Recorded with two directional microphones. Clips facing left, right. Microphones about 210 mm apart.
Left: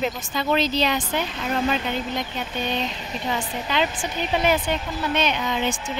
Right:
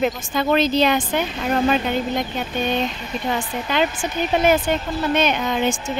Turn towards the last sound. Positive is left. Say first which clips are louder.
# right 4 dB
turn(degrees=-50)  # may be behind; listen again after turning